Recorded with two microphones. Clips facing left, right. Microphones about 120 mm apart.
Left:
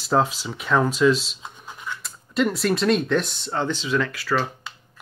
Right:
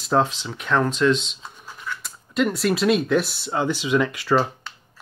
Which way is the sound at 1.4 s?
20° left (ahead or behind).